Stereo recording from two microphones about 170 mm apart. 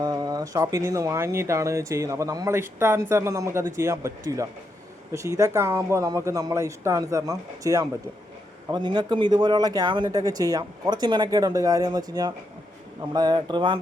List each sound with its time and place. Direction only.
0.0 s speech: 20° right (ahead or behind)